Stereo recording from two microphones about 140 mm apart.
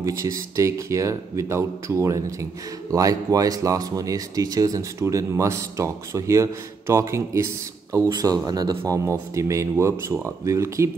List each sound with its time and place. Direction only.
0.2 s speech: 25° right (ahead or behind)